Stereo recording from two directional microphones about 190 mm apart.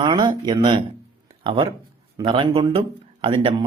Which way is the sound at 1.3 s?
30° right (ahead or behind).